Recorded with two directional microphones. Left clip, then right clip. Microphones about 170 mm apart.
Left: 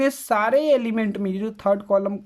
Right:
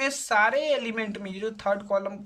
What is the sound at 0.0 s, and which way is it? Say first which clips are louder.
Speech: left 2 dB; 40° left (ahead or behind).